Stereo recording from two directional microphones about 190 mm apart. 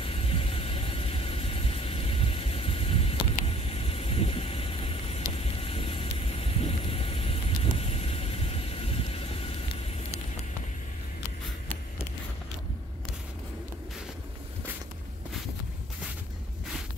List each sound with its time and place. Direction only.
0.0 s vehicle: 30° left (ahead or behind)